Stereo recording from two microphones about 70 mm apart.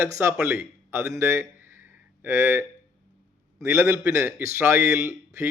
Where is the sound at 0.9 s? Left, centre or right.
Right.